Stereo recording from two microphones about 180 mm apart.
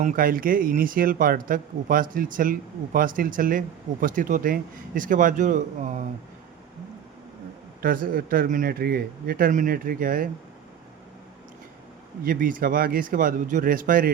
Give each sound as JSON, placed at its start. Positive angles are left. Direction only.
{"t": 0.0, "sound": "speech", "side_deg": -50}
{"t": 7.8, "sound": "speech", "side_deg": -55}
{"t": 12.2, "sound": "speech", "side_deg": -50}